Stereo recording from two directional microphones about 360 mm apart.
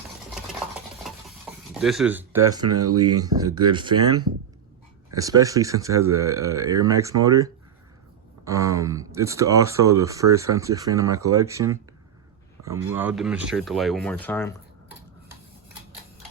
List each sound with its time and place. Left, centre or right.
1.5 s stir: centre
1.8 s speech: centre
2.7 s speech: right
3.2 s speech: centre